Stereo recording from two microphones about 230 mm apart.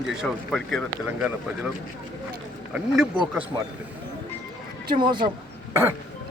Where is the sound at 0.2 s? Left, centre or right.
Centre.